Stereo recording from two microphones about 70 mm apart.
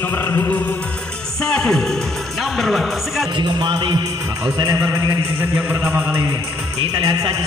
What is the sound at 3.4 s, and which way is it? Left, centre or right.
Speech, right.